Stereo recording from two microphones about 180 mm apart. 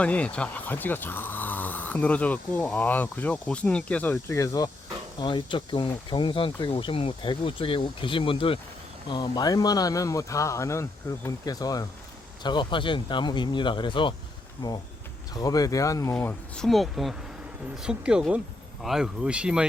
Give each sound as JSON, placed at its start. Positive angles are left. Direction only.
{"t": 0.0, "sound": "speech", "side_deg": 5}
{"t": 15.3, "sound": "speech", "side_deg": 20}
{"t": 16.1, "sound": "speech", "side_deg": 5}